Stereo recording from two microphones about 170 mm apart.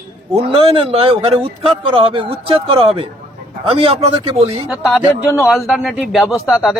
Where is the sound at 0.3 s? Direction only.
30° right (ahead or behind).